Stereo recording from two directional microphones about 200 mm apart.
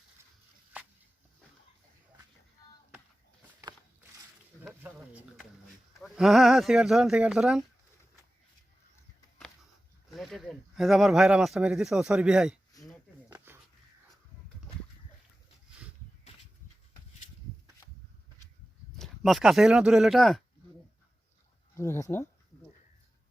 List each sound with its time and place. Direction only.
4.6 s a sound: 10° right (ahead or behind)
6.0 s speech: centre (ahead or behind)
10.1 s speech: centre (ahead or behind)
12.8 s a sound: centre (ahead or behind)
18.9 s speech: centre (ahead or behind)
22.0 s speech: 10° left (ahead or behind)